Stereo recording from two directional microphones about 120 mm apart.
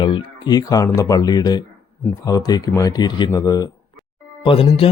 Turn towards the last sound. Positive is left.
turn(degrees=50)  # may be behind; listen again after turning